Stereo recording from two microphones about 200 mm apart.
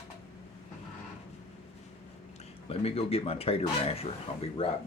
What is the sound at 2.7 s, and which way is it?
Speech, 30° left (ahead or behind).